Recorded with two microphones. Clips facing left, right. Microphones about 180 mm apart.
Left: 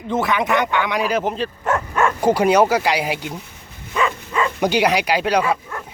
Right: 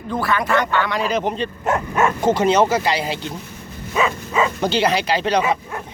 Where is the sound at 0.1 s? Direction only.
20° left (ahead or behind); by 1.5 s 5° left (ahead or behind).